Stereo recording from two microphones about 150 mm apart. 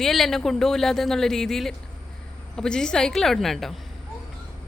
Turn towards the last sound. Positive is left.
turn(degrees=0)  # may be behind; listen again after turning